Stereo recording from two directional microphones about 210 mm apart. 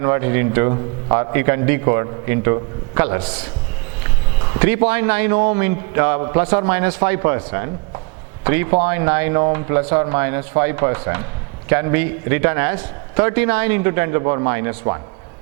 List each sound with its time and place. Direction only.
0.0 s a man's voice: 15° right (ahead or behind)
0.7 s a man's voice: 25° right (ahead or behind)
4.6 s a man's voice: 10° right (ahead or behind)